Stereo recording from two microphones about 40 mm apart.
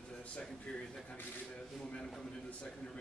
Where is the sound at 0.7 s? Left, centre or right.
Left.